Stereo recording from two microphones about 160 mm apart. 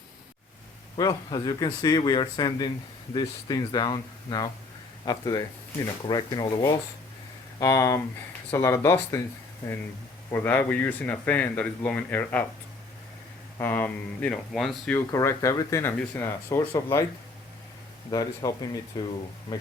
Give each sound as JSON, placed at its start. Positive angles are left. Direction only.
{"t": 0.9, "sound": "speech", "side_deg": 25}
{"t": 13.6, "sound": "speech", "side_deg": 10}
{"t": 14.9, "sound": "speech", "side_deg": 15}
{"t": 18.1, "sound": "speech", "side_deg": 25}